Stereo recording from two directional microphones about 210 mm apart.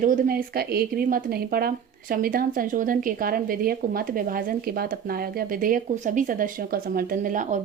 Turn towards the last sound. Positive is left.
turn(degrees=-35)  # may be behind; listen again after turning